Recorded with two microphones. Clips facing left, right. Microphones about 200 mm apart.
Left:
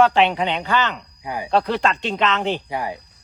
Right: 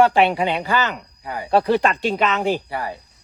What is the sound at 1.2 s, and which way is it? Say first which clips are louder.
Speech: left 2 dB; 15° left (ahead or behind).